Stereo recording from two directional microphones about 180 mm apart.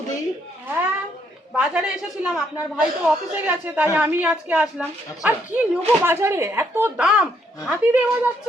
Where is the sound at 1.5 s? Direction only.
5° right (ahead or behind).